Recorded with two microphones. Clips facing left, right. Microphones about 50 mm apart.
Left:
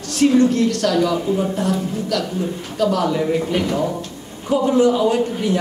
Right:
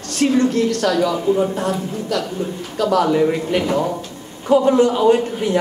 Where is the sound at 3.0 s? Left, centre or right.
Centre.